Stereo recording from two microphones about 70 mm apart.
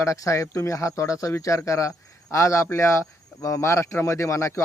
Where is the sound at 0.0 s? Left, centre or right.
Left.